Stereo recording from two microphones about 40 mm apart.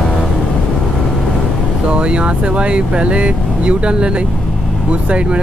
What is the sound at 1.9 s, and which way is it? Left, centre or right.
Speech, right.